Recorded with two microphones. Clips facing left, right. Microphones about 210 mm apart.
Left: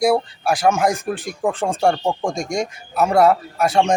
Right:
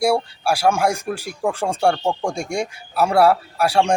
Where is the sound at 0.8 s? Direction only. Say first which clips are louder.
Left 1 dB; centre (ahead or behind).